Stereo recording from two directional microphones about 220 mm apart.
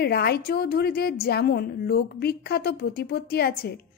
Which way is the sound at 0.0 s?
45° left (ahead or behind).